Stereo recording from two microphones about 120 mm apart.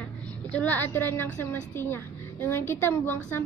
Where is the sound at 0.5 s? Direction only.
10° left (ahead or behind).